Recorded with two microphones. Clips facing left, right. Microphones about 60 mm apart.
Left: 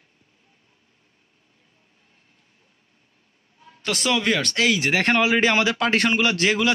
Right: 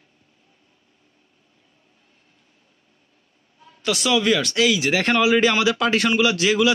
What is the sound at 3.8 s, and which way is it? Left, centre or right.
Speech, left.